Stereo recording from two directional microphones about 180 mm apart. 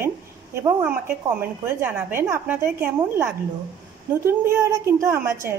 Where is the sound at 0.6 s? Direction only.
15° right (ahead or behind).